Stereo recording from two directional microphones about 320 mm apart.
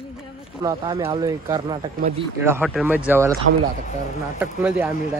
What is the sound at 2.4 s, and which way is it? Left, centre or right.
Speech, centre.